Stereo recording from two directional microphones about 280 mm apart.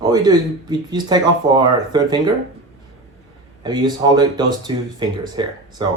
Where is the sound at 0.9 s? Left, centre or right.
Centre.